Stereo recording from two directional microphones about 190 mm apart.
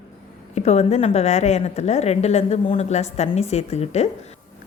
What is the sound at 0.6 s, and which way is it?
A woman's voice, 35° left (ahead or behind).